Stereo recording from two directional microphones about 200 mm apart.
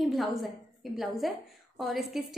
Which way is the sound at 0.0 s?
Centre (ahead or behind).